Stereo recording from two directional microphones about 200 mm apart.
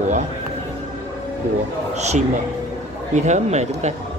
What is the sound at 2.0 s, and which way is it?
Speech, 35° right (ahead or behind).